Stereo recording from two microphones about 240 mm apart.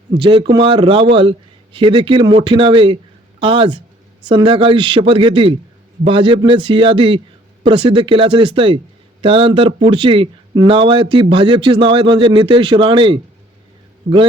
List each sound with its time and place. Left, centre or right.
0.2 s a man's voice: right